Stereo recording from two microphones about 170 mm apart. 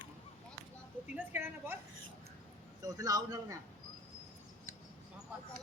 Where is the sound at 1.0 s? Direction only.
10° right (ahead or behind).